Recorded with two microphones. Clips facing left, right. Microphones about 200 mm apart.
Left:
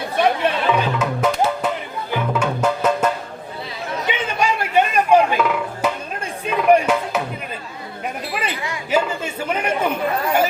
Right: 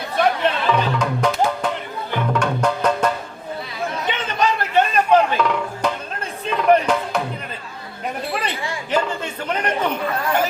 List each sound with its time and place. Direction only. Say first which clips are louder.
0.4 s music: left 1 dB; 5° left (ahead or behind)
4.1 s music: left 1 dB; 10° left (ahead or behind)
8.3 s a sound: even; 10° left (ahead or behind)
8.9 s chatter: left 2 dB; 10° left (ahead or behind)